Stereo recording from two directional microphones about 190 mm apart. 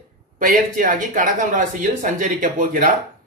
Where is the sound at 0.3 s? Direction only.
45° right (ahead or behind).